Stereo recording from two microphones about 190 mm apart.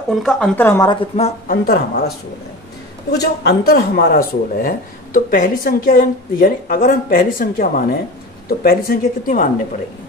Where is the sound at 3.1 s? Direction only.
60° left (ahead or behind).